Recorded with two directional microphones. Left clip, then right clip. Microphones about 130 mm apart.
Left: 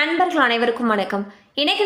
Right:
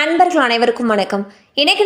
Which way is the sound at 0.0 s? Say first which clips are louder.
Right 5 dB; 40° right (ahead or behind).